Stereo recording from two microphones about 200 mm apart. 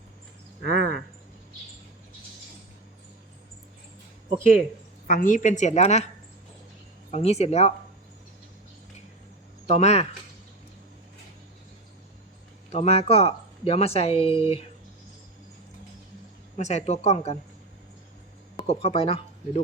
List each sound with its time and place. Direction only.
0.6 s speech: 50° right (ahead or behind)
5.0 s speech: 40° left (ahead or behind)
7.1 s speech: 30° left (ahead or behind)
9.6 s speech: 35° left (ahead or behind)
12.7 s speech: 30° left (ahead or behind)
16.6 s speech: 35° left (ahead or behind)
18.5 s speech: 30° left (ahead or behind)